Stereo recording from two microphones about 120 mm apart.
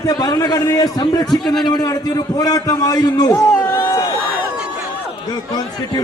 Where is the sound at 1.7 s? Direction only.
35° left (ahead or behind).